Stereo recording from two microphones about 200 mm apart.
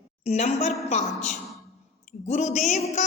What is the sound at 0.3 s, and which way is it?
A woman's voice, 30° left (ahead or behind).